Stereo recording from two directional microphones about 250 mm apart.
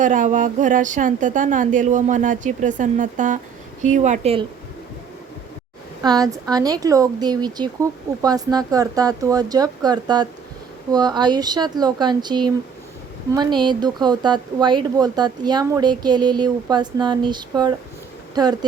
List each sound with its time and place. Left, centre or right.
0.0 s a woman's voice: right
6.0 s speech: centre